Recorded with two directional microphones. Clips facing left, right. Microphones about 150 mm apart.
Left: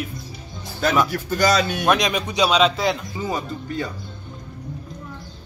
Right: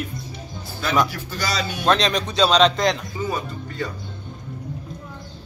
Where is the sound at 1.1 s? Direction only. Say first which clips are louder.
Left 8 dB; 50° left (ahead or behind).